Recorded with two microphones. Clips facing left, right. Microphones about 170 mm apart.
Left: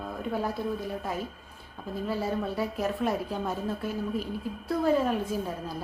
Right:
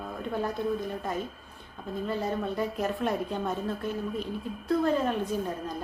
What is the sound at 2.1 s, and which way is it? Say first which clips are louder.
Speech: left 1 dB; 5° left (ahead or behind).